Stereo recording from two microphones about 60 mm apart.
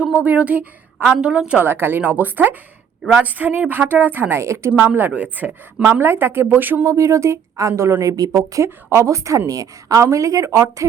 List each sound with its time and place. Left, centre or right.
0.3 s a woman's voice: right
1.5 s a woman's voice: right
2.0 s a woman's voice: right
4.9 s a woman's voice: right
5.8 s a woman's voice: right
6.8 s speech: right
7.7 s speech: right
8.1 s speech: right
9.5 s speech: right